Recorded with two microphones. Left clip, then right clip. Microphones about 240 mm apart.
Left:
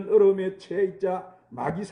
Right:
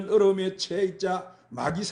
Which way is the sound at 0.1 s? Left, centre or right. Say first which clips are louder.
Left 2 dB; right.